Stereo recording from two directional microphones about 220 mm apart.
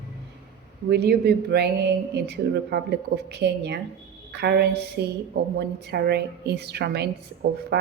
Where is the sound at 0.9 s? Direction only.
45° right (ahead or behind).